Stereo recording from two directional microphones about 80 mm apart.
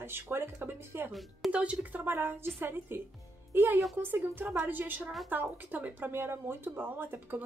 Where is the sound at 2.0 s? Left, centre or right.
Right.